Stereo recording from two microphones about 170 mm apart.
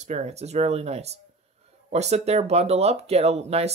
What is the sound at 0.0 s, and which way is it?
Speech, 40° right (ahead or behind).